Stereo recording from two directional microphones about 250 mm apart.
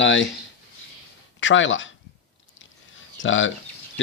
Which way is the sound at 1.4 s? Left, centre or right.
Left.